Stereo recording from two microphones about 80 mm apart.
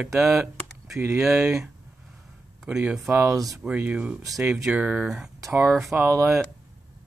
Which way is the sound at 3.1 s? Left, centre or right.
Right.